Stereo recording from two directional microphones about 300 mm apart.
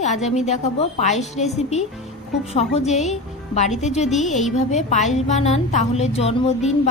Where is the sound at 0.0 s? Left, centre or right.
Left.